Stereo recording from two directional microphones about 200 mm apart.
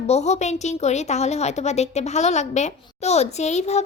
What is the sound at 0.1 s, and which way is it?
A woman's voice, 35° left (ahead or behind).